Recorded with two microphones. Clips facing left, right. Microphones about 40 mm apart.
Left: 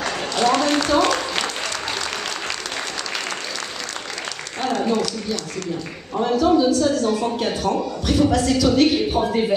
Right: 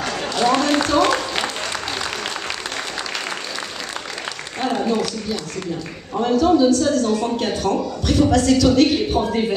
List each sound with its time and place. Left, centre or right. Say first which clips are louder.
0.1 s a sound: right 1 dB; centre
4.6 s applause: right 1 dB; centre
6.1 s a man's voice: right 1 dB; centre